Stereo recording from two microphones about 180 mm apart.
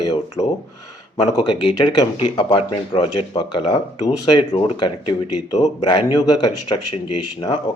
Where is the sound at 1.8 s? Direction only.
25° left (ahead or behind).